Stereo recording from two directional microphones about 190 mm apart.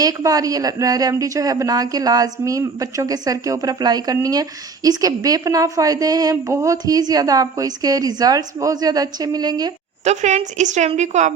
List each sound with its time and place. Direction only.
0.0 s speech: 20° right (ahead or behind)
10.0 s a woman's voice: 35° right (ahead or behind)